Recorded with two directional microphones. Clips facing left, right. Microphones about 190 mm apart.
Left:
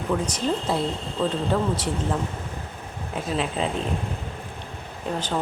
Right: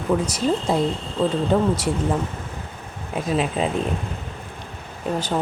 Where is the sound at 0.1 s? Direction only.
15° right (ahead or behind).